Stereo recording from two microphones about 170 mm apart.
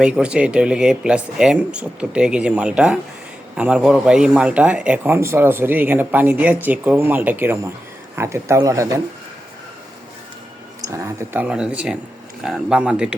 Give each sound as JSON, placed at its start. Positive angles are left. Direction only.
{"t": 0.0, "sound": "a man's voice", "side_deg": -5}
{"t": 10.8, "sound": "speech", "side_deg": -20}